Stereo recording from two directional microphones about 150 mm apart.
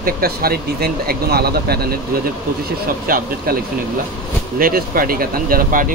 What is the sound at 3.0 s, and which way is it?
Speech, 75° right (ahead or behind).